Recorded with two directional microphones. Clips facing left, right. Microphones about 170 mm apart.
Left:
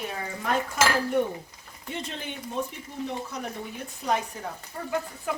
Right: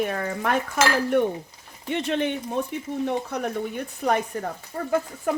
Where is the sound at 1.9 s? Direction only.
70° right (ahead or behind).